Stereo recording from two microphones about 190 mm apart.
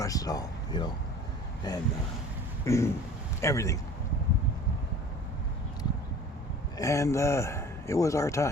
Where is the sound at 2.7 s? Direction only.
15° left (ahead or behind).